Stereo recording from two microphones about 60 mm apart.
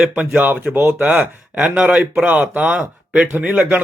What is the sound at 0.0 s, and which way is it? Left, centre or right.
Speech, right.